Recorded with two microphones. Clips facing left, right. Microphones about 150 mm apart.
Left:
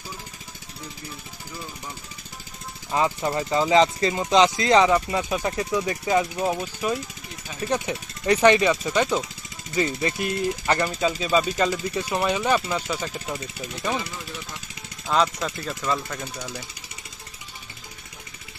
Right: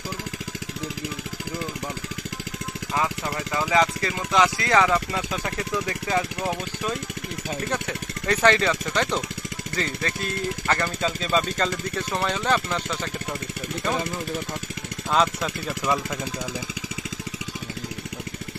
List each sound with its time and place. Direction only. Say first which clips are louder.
2.9 s speech: left 4 dB; 25° left (ahead or behind); by 13.9 s 5° left (ahead or behind)
14.0 s speech: right 7 dB; 50° right (ahead or behind)
15.0 s speech: even; centre (ahead or behind)